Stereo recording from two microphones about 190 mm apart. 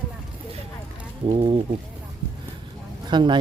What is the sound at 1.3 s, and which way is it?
Speech, 30° right (ahead or behind).